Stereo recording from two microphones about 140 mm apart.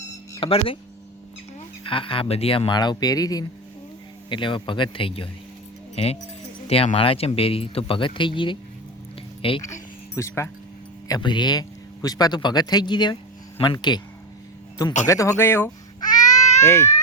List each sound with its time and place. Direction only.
0.3 s speech: 40° left (ahead or behind)
1.8 s speech: 40° left (ahead or behind)
6.7 s speech: 45° left (ahead or behind)
10.2 s speech: 20° left (ahead or behind)
11.1 s speech: 35° left (ahead or behind)
15.0 s speech: 20° left (ahead or behind)
16.0 s baby cry: 30° left (ahead or behind)